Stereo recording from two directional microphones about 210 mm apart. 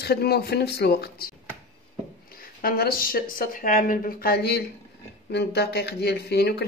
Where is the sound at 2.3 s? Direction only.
45° left (ahead or behind).